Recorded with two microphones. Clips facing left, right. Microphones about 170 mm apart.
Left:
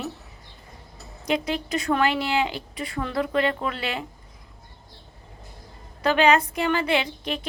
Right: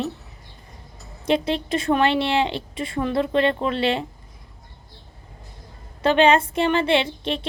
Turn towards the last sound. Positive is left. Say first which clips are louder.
# right 3 dB
turn(degrees=-25)  # may be behind; listen again after turning